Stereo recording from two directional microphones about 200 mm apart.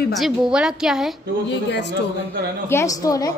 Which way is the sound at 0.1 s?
Centre (ahead or behind).